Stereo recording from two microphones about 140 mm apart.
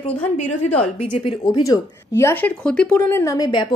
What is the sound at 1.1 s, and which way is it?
Speech, 35° left (ahead or behind).